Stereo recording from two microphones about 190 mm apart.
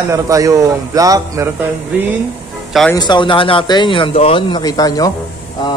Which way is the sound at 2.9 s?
25° left (ahead or behind).